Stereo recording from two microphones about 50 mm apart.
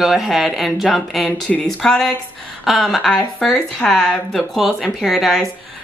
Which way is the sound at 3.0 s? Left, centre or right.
Centre.